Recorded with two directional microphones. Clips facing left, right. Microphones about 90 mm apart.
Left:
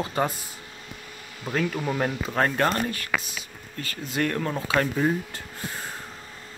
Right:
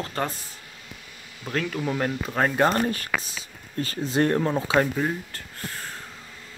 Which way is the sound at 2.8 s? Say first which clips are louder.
Right 2 dB; 35° right (ahead or behind).